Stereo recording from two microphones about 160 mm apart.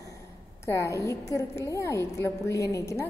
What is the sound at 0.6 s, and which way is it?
A woman's voice, 20° left (ahead or behind).